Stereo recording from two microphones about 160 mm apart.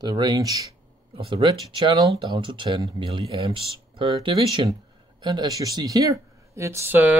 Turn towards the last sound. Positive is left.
turn(degrees=-10)  # may be behind; listen again after turning